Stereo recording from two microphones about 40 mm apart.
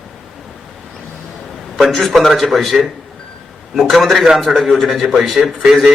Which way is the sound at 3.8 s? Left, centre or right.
Centre.